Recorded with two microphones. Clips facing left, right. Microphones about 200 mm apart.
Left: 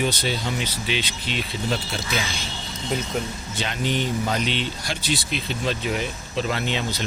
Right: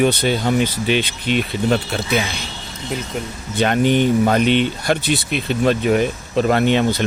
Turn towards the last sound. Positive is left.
turn(degrees=-55)  # may be behind; listen again after turning